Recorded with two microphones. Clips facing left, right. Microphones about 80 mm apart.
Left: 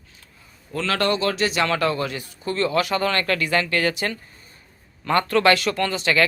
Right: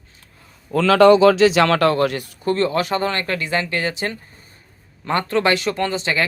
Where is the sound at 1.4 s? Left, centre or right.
Right.